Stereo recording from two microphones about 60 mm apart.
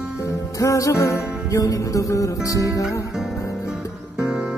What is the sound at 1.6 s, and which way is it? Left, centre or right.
Music, left.